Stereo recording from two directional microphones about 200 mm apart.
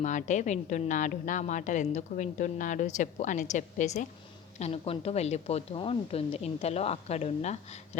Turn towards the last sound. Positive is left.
turn(degrees=35)  # may be behind; listen again after turning